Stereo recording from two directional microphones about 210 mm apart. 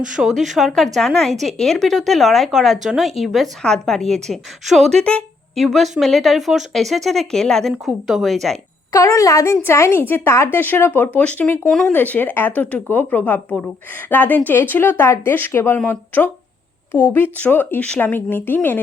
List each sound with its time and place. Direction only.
0.2 s speech: centre (ahead or behind)
8.9 s speech: 15° left (ahead or behind)